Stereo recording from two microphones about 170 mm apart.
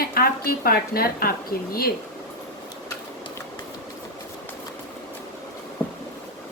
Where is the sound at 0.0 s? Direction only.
60° left (ahead or behind).